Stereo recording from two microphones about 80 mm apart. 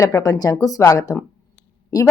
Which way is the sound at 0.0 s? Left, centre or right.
Left.